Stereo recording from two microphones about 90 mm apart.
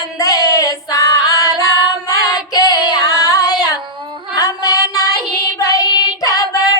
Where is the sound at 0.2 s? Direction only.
40° left (ahead or behind).